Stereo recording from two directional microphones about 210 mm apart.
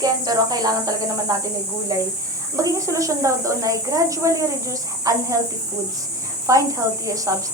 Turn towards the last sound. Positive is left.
turn(degrees=-15)  # may be behind; listen again after turning